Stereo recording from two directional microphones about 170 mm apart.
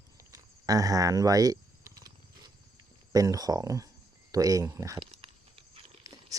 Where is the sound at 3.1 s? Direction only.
20° right (ahead or behind).